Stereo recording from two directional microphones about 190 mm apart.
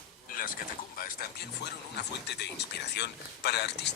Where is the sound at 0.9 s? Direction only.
55° left (ahead or behind).